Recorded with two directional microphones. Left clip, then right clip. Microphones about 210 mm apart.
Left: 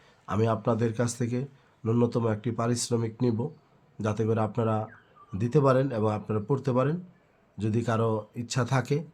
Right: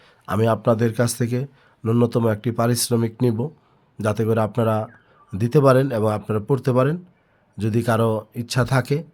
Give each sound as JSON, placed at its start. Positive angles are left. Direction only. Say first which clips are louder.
{"t": 0.3, "sound": "speech", "louder": "right 8 dB", "side_deg": -40}